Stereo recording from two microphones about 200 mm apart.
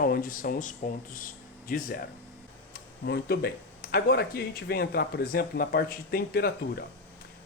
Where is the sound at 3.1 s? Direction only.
55° left (ahead or behind).